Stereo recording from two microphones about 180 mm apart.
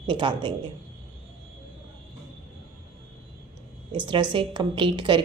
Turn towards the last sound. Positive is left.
turn(degrees=-25)  # may be behind; listen again after turning